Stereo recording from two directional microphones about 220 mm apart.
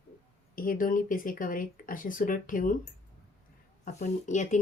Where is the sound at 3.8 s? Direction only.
35° left (ahead or behind).